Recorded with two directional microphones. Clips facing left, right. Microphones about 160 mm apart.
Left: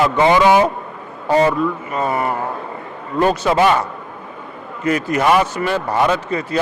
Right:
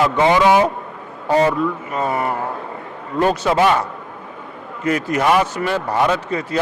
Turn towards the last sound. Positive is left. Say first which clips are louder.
# left 1 dB
turn(degrees=20)  # may be behind; listen again after turning